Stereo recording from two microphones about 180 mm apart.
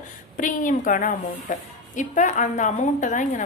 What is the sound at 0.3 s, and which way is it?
A woman's voice, 45° left (ahead or behind).